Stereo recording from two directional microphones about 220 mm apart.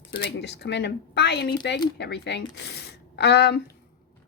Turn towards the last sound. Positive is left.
turn(degrees=50)  # may be behind; listen again after turning